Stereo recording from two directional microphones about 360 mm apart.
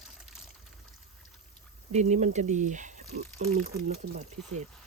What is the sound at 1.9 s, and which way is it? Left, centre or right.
Speech, centre.